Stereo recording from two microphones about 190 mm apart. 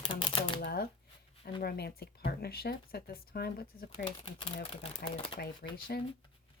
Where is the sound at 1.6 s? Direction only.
55° left (ahead or behind).